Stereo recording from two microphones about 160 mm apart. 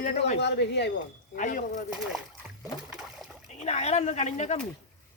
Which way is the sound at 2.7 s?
25° left (ahead or behind).